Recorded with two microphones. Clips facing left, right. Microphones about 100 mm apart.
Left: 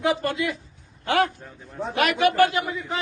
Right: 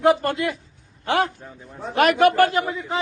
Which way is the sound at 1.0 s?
25° right (ahead or behind).